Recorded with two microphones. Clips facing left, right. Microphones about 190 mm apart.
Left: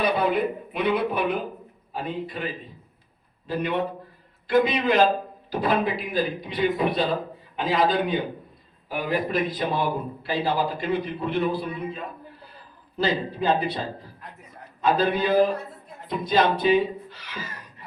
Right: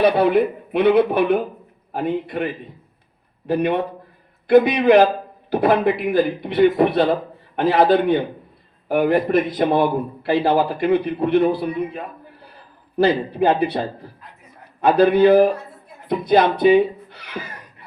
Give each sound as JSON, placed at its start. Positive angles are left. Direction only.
{"t": 0.0, "sound": "a man's voice", "side_deg": -60}
{"t": 13.0, "sound": "a man's voice", "side_deg": -60}